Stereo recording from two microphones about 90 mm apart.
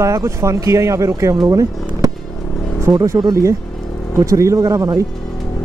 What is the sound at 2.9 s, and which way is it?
Speech, 45° right (ahead or behind).